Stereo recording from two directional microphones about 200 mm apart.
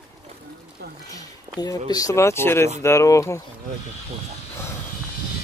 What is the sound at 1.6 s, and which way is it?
Speech, 20° left (ahead or behind).